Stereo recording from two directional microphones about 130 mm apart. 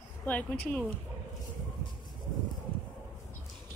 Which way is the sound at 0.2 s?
10° left (ahead or behind).